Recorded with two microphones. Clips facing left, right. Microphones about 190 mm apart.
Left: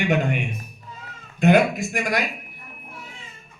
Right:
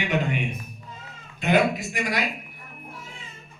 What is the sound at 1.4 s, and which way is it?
Speech, 45° left (ahead or behind).